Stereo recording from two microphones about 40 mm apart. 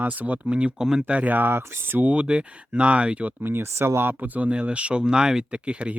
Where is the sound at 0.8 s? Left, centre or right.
Centre.